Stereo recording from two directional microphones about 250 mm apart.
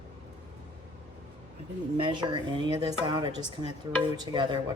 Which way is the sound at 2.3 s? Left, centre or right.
Centre.